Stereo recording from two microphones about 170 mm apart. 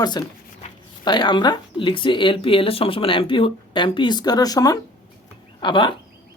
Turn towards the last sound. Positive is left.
turn(degrees=30)  # may be behind; listen again after turning